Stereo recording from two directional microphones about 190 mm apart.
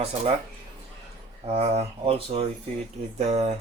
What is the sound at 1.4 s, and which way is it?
Speech, 30° right (ahead or behind).